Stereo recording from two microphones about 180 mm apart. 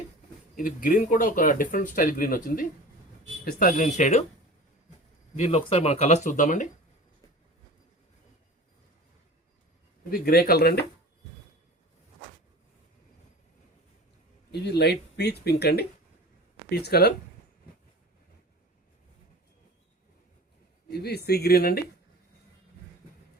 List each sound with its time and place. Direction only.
0.5 s speech: 50° left (ahead or behind)
5.4 s speech: 35° left (ahead or behind)
10.1 s speech: 55° left (ahead or behind)
14.5 s speech: 70° left (ahead or behind)
20.8 s speech: 60° left (ahead or behind)